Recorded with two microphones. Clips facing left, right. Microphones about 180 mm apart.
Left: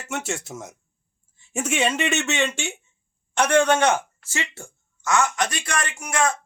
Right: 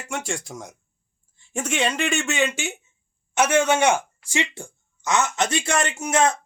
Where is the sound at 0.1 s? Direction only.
5° left (ahead or behind).